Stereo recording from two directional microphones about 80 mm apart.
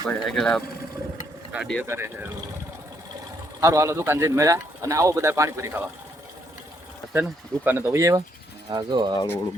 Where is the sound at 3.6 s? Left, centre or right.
Right.